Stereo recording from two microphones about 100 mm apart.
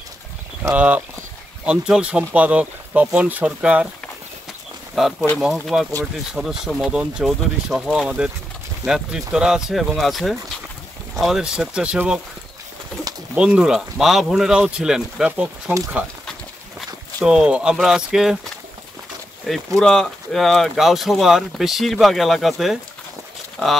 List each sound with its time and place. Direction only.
0.7 s speech: 15° right (ahead or behind)
5.4 s speech: 5° right (ahead or behind)
13.3 s speech: 10° right (ahead or behind)
17.2 s speech: 10° right (ahead or behind)
19.5 s speech: centre (ahead or behind)